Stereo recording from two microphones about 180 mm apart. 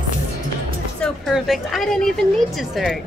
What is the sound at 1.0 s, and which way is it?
A woman's voice, centre (ahead or behind).